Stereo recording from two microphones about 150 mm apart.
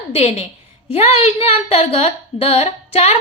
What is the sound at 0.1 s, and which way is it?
A woman's voice, 45° left (ahead or behind).